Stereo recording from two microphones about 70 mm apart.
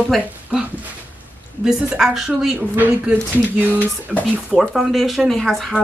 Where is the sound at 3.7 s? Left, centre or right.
Left.